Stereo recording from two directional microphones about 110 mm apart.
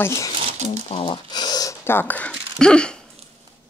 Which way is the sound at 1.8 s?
20° left (ahead or behind).